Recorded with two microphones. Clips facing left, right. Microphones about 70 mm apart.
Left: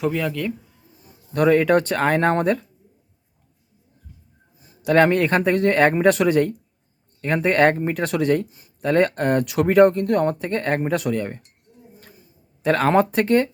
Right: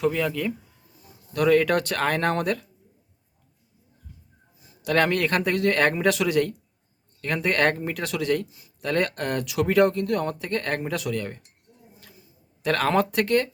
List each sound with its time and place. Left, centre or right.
0.0 s speech: centre
1.3 s speech: left
4.8 s speech: left
8.8 s speech: left
10.9 s speech: left
11.2 s speech: left
12.6 s speech: left